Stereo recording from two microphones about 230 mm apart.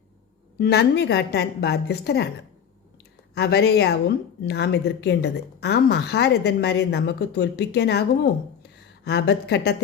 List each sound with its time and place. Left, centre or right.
0.6 s a woman's voice: left
3.3 s a woman's voice: left